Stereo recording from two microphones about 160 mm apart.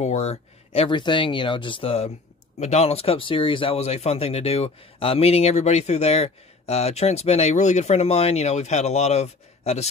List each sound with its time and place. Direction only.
0.0 s speech: 45° left (ahead or behind)